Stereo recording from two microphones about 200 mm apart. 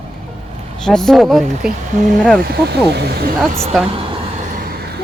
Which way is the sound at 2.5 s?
55° right (ahead or behind).